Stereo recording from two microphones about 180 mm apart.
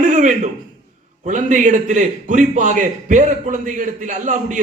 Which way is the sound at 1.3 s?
45° right (ahead or behind).